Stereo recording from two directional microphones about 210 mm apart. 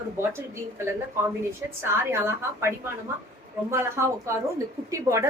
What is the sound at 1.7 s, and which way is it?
A woman's voice, 10° right (ahead or behind).